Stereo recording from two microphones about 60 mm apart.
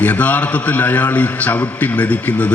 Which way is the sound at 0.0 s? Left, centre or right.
Left.